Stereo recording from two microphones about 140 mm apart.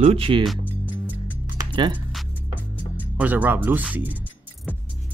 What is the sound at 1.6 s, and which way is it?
Music, 35° right (ahead or behind).